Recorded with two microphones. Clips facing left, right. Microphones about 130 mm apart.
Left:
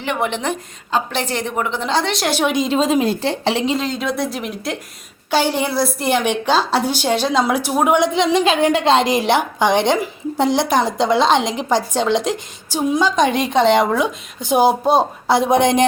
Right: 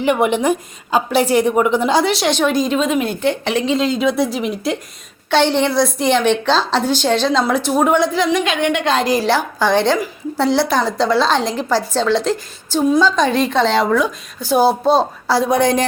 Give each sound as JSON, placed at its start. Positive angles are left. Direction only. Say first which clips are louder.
{"t": 0.0, "sound": "a woman's voice", "louder": "right 6 dB", "side_deg": -10}
{"t": 2.4, "sound": "a woman's voice", "louder": "left 2 dB", "side_deg": 20}
{"t": 3.8, "sound": "a woman's voice", "louder": "right 5 dB", "side_deg": 0}